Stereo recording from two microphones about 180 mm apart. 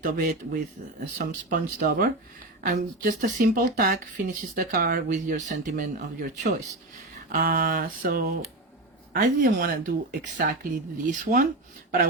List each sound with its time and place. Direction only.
0.0 s speech: 50° right (ahead or behind)